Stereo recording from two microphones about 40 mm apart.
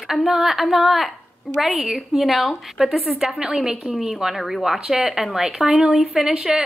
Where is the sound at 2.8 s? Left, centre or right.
Right.